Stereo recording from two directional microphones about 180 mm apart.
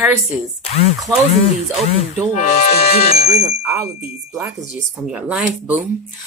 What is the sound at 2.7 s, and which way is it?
Speech, 60° left (ahead or behind).